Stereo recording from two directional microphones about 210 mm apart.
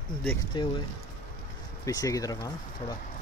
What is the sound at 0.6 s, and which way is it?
Speech, 20° left (ahead or behind).